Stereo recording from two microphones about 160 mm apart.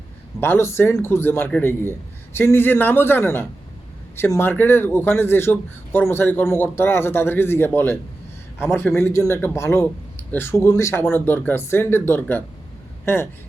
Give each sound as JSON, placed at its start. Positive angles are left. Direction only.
{"t": 0.3, "sound": "a man's voice", "side_deg": 15}